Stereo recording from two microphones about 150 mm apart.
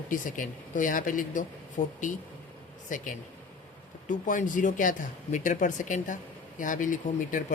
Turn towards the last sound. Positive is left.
turn(degrees=60)  # may be behind; listen again after turning